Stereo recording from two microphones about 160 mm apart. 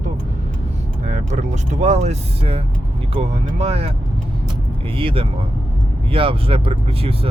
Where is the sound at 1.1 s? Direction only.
45° right (ahead or behind).